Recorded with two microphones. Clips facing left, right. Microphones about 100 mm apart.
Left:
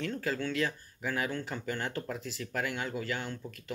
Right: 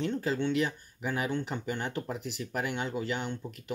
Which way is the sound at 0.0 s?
25° right (ahead or behind).